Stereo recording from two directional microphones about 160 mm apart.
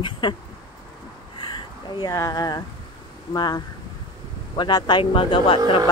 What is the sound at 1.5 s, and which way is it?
Speech, 25° left (ahead or behind).